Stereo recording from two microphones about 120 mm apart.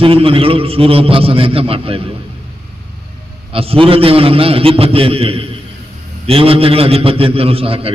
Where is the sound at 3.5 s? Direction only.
50° right (ahead or behind).